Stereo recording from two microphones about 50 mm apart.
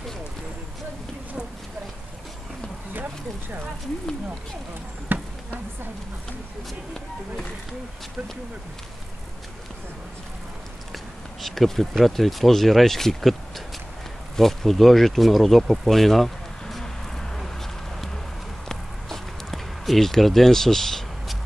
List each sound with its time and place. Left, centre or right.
5.1 s insect: right
11.4 s speech: centre
18.7 s a sound: centre